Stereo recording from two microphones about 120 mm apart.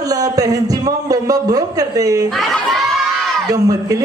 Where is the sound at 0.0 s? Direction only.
30° right (ahead or behind).